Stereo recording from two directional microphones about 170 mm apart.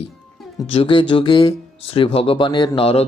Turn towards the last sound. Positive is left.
turn(degrees=35)  # may be behind; listen again after turning